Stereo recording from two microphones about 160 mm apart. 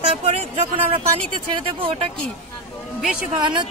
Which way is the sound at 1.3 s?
30° right (ahead or behind).